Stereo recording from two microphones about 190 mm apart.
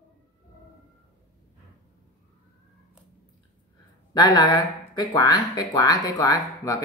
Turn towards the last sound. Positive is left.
turn(degrees=20)  # may be behind; listen again after turning